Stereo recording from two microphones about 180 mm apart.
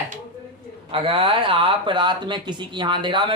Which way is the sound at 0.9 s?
30° right (ahead or behind).